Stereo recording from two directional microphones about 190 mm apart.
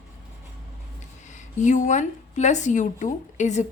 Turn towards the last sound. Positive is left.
turn(degrees=40)  # may be behind; listen again after turning